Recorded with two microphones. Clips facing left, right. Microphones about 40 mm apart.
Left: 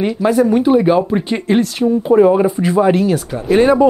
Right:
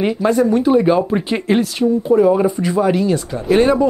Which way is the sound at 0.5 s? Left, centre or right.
Centre.